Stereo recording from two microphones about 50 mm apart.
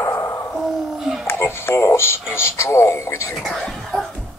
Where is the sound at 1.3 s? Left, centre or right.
Left.